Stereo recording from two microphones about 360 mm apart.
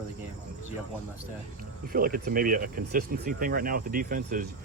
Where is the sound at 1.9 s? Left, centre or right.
Right.